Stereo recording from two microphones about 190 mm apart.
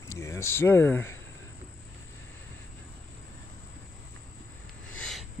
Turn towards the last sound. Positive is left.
turn(degrees=0)  # may be behind; listen again after turning